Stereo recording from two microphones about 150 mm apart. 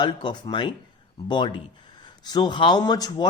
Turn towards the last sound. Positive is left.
turn(degrees=30)  # may be behind; listen again after turning